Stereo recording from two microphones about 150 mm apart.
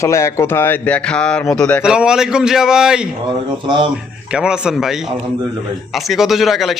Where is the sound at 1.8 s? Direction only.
5° right (ahead or behind).